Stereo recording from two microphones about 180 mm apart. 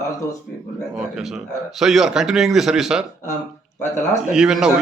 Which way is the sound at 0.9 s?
5° right (ahead or behind).